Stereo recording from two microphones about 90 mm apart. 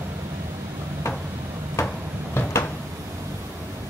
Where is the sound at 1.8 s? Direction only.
35° left (ahead or behind).